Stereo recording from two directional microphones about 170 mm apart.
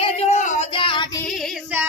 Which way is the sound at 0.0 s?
40° left (ahead or behind).